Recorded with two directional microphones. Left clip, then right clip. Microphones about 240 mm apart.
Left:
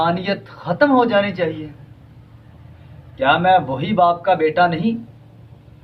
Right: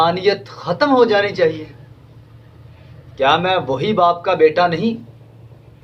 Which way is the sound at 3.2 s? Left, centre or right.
Right.